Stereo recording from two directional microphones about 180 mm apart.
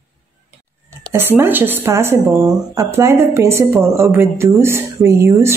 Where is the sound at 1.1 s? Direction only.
10° right (ahead or behind).